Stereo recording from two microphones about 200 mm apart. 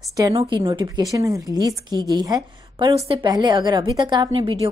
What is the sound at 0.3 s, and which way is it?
Speech, 20° right (ahead or behind).